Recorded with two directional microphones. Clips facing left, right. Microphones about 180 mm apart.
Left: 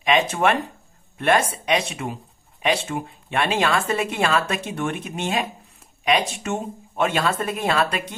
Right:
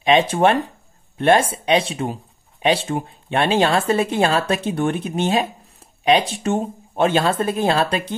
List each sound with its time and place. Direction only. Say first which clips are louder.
0.0 s speech: right 4 dB; 30° right (ahead or behind)